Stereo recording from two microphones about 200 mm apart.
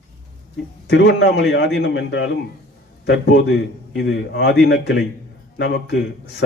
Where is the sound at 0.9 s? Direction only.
60° left (ahead or behind).